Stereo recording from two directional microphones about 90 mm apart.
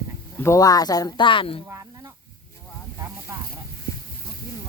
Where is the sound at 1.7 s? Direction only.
40° right (ahead or behind).